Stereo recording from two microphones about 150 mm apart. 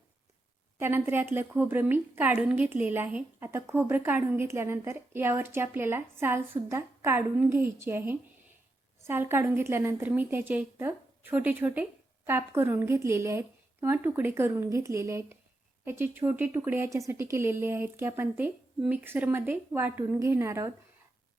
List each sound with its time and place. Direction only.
0.8 s a woman's voice: 15° right (ahead or behind)